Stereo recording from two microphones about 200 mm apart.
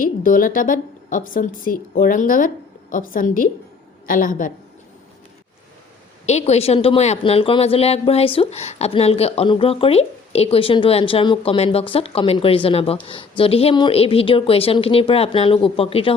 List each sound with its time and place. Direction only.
0.0 s a woman's voice: 45° left (ahead or behind)
6.2 s speech: 35° left (ahead or behind)